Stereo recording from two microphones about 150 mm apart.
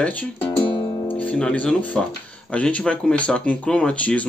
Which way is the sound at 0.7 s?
30° left (ahead or behind).